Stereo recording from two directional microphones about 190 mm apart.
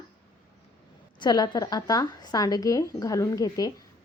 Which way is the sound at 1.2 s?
25° left (ahead or behind).